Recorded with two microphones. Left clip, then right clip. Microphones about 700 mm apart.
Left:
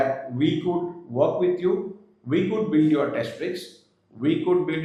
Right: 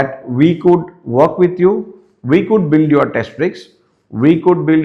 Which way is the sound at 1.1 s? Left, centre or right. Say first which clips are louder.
Right 10 dB; right.